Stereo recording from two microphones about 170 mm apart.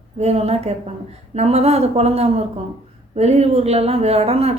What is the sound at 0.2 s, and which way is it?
A woman's voice, 40° right (ahead or behind).